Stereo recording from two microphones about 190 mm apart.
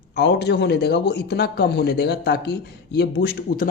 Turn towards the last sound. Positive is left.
turn(degrees=55)  # may be behind; listen again after turning